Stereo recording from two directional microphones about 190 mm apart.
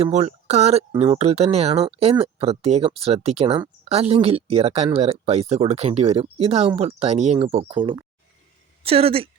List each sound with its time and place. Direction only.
0.0 s speech: 35° right (ahead or behind)